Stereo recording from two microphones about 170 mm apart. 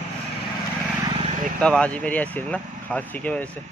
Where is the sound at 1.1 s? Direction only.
40° right (ahead or behind).